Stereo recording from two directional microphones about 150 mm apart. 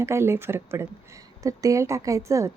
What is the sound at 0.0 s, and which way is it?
A woman's voice, 15° right (ahead or behind).